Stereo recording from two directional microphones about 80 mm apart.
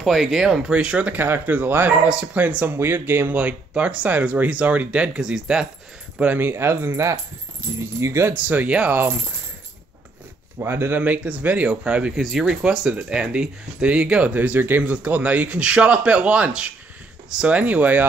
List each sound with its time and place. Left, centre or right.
0.0 s speech: centre
6.1 s speech: centre
10.6 s speech: right
11.0 s speech: centre